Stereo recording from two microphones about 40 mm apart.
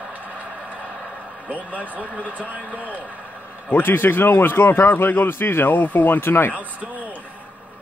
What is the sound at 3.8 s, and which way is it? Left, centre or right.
A man's voice, left.